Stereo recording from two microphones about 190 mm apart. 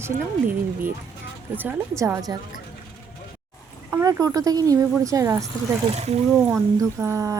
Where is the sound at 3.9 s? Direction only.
15° right (ahead or behind).